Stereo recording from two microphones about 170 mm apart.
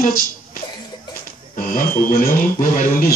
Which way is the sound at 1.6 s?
55° left (ahead or behind).